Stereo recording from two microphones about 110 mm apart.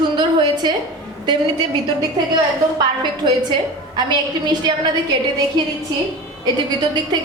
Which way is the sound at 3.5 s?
45° right (ahead or behind).